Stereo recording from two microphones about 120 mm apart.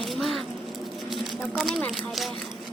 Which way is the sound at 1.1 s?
Centre (ahead or behind).